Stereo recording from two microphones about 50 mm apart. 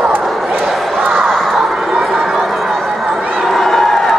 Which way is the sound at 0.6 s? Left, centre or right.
Centre.